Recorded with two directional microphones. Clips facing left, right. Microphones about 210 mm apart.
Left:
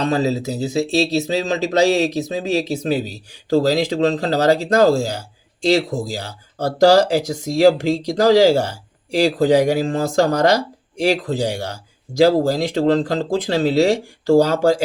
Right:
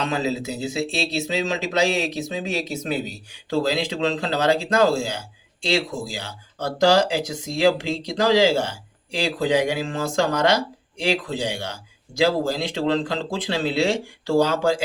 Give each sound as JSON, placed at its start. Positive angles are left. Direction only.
{"t": 0.0, "sound": "speech", "side_deg": 35}